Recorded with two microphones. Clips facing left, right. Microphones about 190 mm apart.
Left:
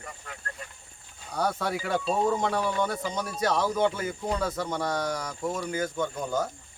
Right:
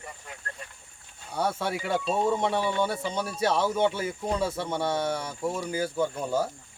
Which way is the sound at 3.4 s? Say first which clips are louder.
Right 1 dB; 30° right (ahead or behind).